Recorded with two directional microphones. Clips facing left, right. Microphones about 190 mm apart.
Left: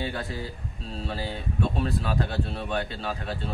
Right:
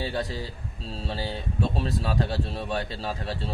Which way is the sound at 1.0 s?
30° right (ahead or behind).